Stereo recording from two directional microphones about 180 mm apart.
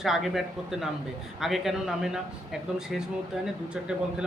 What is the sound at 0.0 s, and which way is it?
A man's voice, centre (ahead or behind).